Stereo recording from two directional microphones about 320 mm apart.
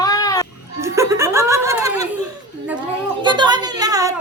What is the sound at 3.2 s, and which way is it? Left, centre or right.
Speech, centre.